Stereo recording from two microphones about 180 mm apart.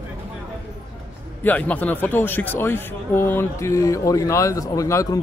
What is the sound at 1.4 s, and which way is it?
Speech, 10° left (ahead or behind).